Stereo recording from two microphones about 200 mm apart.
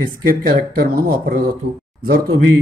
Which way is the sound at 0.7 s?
45° right (ahead or behind).